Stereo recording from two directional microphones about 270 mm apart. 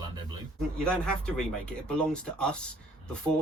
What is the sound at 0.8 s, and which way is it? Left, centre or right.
Speech, centre.